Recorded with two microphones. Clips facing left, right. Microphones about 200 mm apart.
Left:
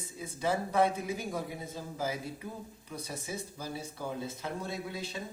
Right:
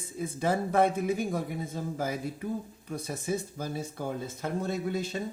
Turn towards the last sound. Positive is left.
turn(degrees=-50)  # may be behind; listen again after turning